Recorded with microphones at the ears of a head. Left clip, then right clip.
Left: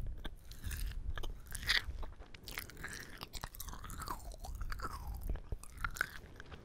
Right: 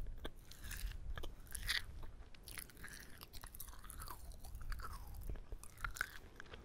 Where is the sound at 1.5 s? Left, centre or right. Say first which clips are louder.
Left 7 dB; left.